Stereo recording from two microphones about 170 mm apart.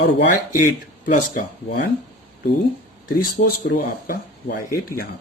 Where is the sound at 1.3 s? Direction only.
55° left (ahead or behind).